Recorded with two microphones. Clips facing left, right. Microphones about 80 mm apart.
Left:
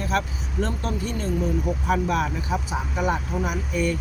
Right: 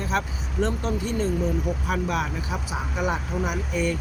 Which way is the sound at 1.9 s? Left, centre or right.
Centre.